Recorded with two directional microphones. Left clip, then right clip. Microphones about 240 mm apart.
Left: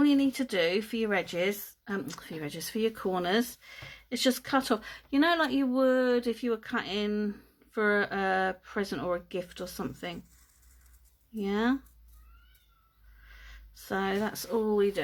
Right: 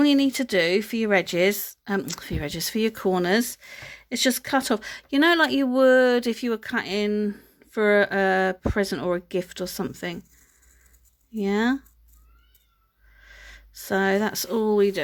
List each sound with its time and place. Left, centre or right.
0.0 s speech: right
11.3 s speech: right
13.2 s speech: right